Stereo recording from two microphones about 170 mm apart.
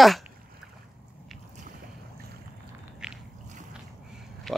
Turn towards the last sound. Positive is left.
turn(degrees=0)  # may be behind; listen again after turning